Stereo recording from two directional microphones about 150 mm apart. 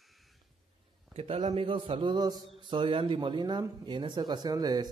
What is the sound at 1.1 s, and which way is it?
A man's voice, 40° right (ahead or behind).